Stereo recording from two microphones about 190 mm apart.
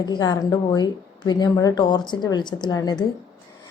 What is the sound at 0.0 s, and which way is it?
A woman's voice, 20° left (ahead or behind).